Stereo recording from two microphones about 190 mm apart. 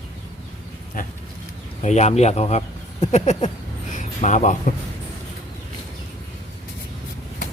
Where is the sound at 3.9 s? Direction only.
40° left (ahead or behind).